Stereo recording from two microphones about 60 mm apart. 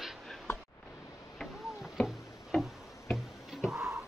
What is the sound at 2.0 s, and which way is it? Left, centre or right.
Tick-tock, centre.